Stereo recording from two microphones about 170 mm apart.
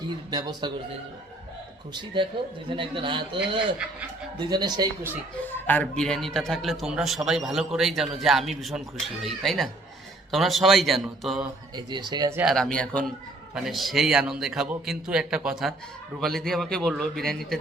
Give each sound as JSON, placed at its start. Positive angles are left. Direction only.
{"t": 0.3, "sound": "a man's voice", "side_deg": -25}
{"t": 1.9, "sound": "a man's voice", "side_deg": -25}
{"t": 4.4, "sound": "a man's voice", "side_deg": -25}
{"t": 5.5, "sound": "a man's voice", "side_deg": 10}
{"t": 11.9, "sound": "a man's voice", "side_deg": -25}
{"t": 12.4, "sound": "a man's voice", "side_deg": 0}